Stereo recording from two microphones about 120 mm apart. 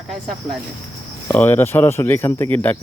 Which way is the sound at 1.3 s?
15° left (ahead or behind).